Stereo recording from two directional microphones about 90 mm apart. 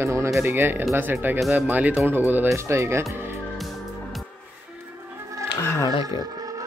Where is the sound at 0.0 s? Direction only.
30° right (ahead or behind).